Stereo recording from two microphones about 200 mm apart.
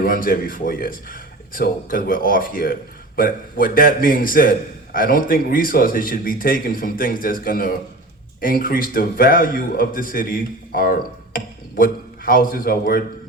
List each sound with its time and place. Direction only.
0.0 s a man's voice: 45° left (ahead or behind)